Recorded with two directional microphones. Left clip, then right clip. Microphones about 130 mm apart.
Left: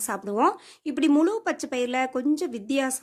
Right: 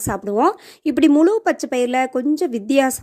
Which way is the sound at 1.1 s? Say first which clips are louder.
Right 6 dB; 40° right (ahead or behind).